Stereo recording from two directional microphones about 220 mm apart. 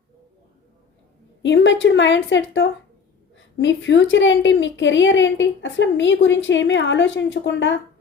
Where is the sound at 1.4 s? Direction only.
55° left (ahead or behind).